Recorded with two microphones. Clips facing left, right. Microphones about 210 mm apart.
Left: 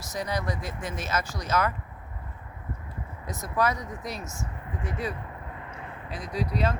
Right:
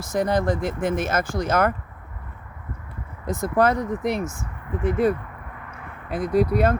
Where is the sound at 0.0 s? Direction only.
50° right (ahead or behind).